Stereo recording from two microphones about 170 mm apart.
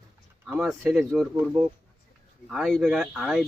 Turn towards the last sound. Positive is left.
turn(degrees=0)  # may be behind; listen again after turning